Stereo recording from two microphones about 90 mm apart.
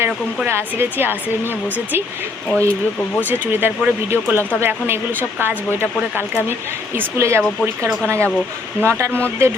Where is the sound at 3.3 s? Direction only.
20° right (ahead or behind).